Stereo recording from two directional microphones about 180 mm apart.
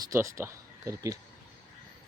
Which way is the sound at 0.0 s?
15° right (ahead or behind).